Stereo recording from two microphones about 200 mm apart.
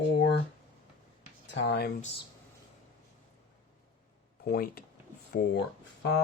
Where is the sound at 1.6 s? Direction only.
55° left (ahead or behind).